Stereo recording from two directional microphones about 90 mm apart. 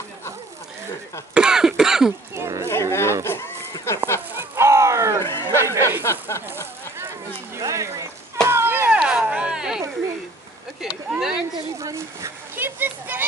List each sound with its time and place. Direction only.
1.3 s cough: 10° right (ahead or behind)
2.3 s a sound: 30° right (ahead or behind)
2.9 s a sound: 30° left (ahead or behind)
4.6 s a sound: 35° right (ahead or behind)
5.2 s chatter: 30° left (ahead or behind)
5.6 s a sound: 30° right (ahead or behind)
6.0 s speech: 30° left (ahead or behind)
7.5 s speech: 35° right (ahead or behind)
8.5 s chop: 25° right (ahead or behind); by 9.8 s 10° right (ahead or behind)
10.8 s speech: 10° right (ahead or behind)
11.5 s speech: 35° right (ahead or behind)
12.5 s a child's voice: 25° right (ahead or behind)